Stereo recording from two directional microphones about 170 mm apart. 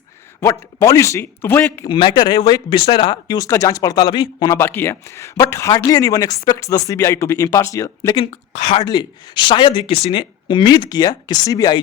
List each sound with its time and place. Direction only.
0.3 s speech: 15° left (ahead or behind)
1.9 s speech: 25° left (ahead or behind)
4.5 s speech: 15° left (ahead or behind)
8.1 s speech: 35° left (ahead or behind)